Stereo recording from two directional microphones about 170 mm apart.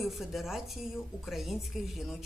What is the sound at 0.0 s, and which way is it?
A woman's voice, centre (ahead or behind).